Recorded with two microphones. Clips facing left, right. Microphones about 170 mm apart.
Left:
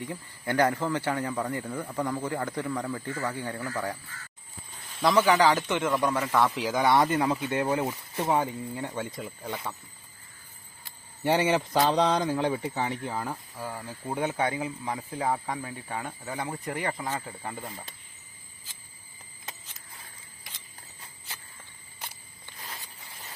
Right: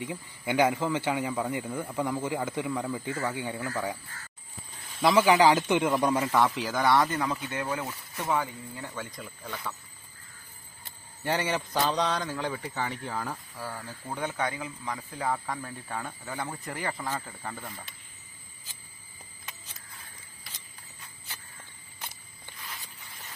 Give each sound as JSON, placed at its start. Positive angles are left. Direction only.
{"t": 0.1, "sound": "speech", "side_deg": -5}
{"t": 4.9, "sound": "speech", "side_deg": -5}
{"t": 6.3, "sound": "speech", "side_deg": 0}
{"t": 6.7, "sound": "speech", "side_deg": 20}
{"t": 11.2, "sound": "speech", "side_deg": 25}
{"t": 12.7, "sound": "speech", "side_deg": 15}
{"t": 15.5, "sound": "speech", "side_deg": 10}